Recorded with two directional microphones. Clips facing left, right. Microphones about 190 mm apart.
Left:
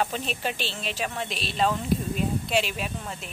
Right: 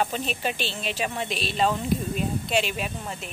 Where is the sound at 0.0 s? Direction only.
5° right (ahead or behind).